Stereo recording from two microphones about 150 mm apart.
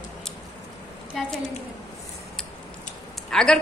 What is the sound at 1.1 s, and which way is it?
Speech, 5° left (ahead or behind).